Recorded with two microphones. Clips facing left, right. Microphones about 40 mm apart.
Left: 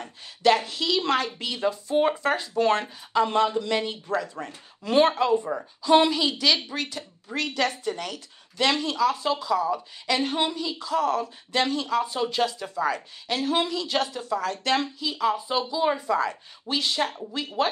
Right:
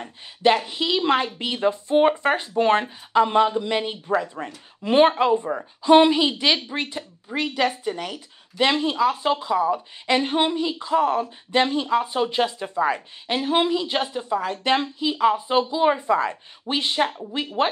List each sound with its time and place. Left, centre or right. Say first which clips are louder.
0.0 s speech: right 2 dB; right